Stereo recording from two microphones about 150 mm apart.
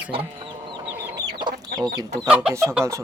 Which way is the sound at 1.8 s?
25° right (ahead or behind).